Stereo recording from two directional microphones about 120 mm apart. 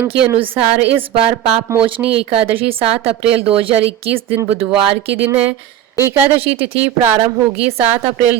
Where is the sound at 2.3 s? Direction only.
55° right (ahead or behind).